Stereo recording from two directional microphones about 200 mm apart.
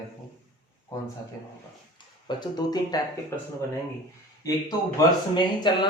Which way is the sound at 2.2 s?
20° left (ahead or behind).